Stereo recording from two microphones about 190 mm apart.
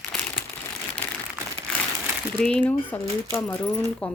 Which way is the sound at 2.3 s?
5° left (ahead or behind).